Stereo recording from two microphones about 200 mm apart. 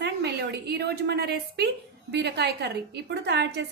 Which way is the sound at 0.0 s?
55° right (ahead or behind).